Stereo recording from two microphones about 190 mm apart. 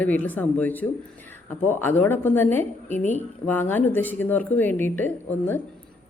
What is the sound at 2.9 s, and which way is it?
Speech, 40° left (ahead or behind).